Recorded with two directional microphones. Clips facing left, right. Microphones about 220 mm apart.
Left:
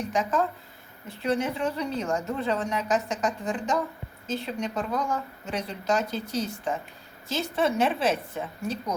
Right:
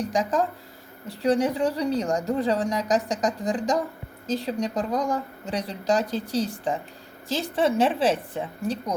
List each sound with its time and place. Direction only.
0.0 s a woman's voice: 35° right (ahead or behind)